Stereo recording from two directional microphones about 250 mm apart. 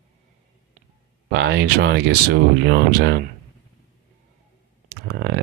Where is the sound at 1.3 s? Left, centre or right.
Right.